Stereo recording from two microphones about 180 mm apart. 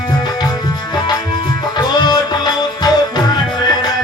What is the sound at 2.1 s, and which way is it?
Music, 25° left (ahead or behind).